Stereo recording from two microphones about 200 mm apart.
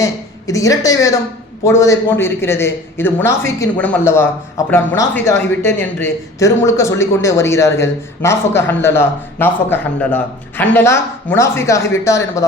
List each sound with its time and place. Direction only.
0.0 s a woman's voice: 15° left (ahead or behind)